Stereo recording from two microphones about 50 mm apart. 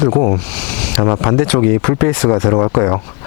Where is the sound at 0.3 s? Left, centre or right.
Centre.